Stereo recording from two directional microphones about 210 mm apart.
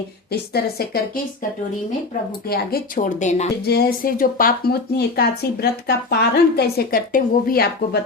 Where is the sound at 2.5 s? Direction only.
45° left (ahead or behind).